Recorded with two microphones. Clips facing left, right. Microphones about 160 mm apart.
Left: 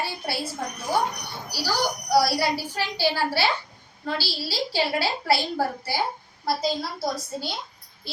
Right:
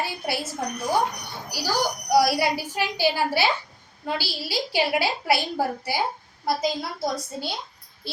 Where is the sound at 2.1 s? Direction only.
15° right (ahead or behind).